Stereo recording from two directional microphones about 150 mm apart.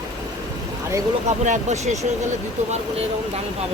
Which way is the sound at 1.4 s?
50° right (ahead or behind).